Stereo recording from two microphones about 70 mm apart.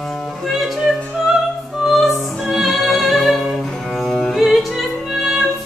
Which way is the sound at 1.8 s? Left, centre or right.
Centre.